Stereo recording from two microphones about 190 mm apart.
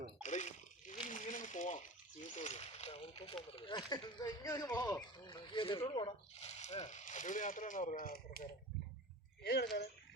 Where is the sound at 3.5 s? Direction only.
25° left (ahead or behind); by 9.6 s 55° left (ahead or behind).